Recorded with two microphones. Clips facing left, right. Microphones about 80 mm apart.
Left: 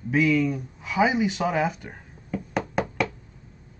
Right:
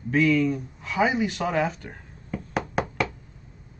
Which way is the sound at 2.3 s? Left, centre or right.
Centre.